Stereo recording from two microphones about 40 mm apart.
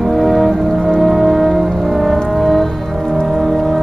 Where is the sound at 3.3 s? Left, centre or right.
Centre.